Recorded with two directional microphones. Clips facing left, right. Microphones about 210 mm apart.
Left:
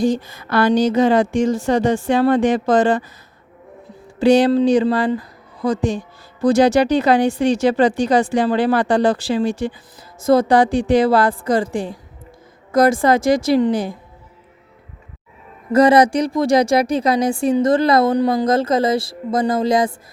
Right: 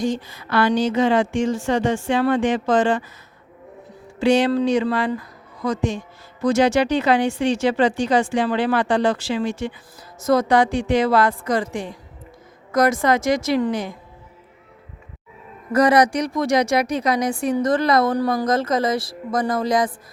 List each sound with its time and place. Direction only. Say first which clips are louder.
0.0 s speech: left 5 dB; 40° left (ahead or behind)
4.2 s speech: left 4 dB; 35° left (ahead or behind)
15.7 s speech: left 4 dB; 25° left (ahead or behind)